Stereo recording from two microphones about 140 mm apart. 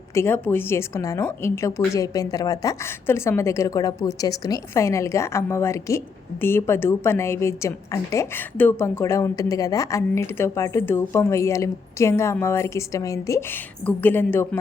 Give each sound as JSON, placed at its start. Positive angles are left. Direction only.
{"t": 0.1, "sound": "a woman's voice", "side_deg": 15}